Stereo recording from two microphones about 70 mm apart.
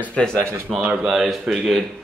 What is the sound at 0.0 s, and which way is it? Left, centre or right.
Speech, centre.